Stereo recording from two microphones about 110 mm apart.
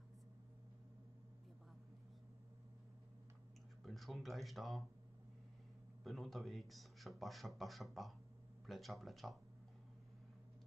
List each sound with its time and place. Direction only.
3.8 s a man's voice: centre (ahead or behind)
6.0 s a man's voice: centre (ahead or behind)